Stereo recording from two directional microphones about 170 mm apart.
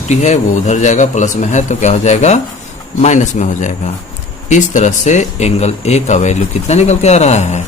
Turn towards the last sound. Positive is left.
turn(degrees=40)  # may be behind; listen again after turning